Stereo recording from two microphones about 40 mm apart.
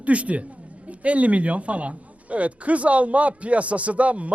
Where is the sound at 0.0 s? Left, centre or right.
Right.